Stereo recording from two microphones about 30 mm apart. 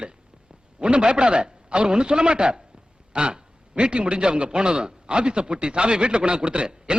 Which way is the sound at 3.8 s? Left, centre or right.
Right.